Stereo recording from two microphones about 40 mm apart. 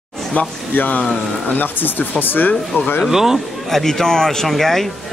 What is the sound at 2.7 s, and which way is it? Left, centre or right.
Speech, left.